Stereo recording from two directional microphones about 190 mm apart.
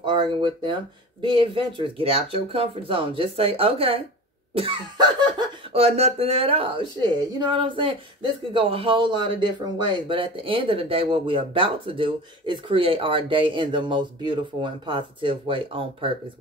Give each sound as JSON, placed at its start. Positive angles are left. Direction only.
{"t": 0.0, "sound": "speech", "side_deg": -25}